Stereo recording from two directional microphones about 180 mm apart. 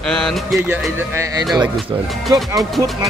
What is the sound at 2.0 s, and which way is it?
Speech, centre (ahead or behind).